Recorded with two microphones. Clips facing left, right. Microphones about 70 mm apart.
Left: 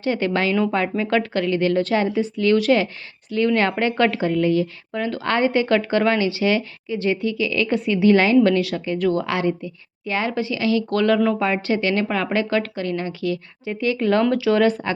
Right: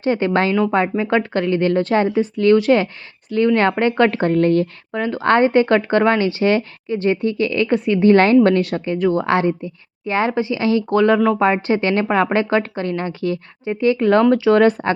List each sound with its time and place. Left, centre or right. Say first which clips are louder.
0.0 s speech: right 4 dB; right
4.2 s a woman's voice: right 4 dB; right
4.9 s speech: right 6 dB; right